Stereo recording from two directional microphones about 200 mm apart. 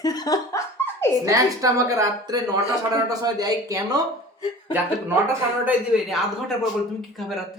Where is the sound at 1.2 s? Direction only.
15° right (ahead or behind).